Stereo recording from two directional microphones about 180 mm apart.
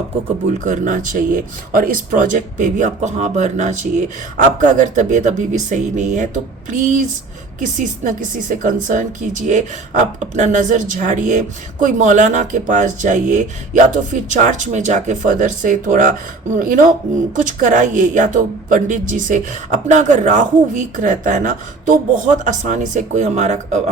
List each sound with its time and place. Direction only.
0.6 s a woman's voice: 45° right (ahead or behind)